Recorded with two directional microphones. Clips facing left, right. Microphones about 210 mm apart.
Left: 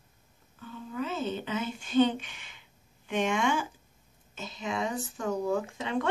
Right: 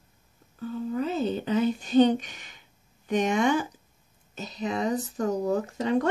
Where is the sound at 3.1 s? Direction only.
40° right (ahead or behind).